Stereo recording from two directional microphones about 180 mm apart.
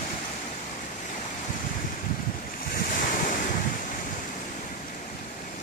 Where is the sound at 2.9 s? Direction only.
50° left (ahead or behind).